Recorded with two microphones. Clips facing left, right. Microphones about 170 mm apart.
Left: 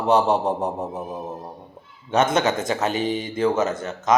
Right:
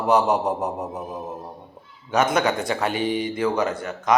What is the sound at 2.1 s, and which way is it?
Speech, 25° left (ahead or behind).